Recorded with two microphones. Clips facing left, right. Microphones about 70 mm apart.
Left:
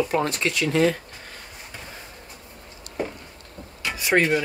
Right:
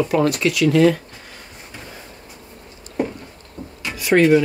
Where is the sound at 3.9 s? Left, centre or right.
Left.